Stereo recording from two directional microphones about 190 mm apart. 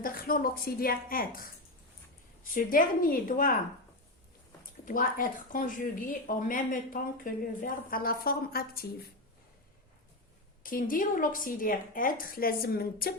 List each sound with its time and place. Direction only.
0.0 s a woman's voice: 50° left (ahead or behind)
4.9 s a woman's voice: 45° left (ahead or behind)
10.6 s a woman's voice: 45° left (ahead or behind)